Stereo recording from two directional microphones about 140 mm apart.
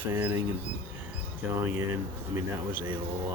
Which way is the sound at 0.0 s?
15° right (ahead or behind).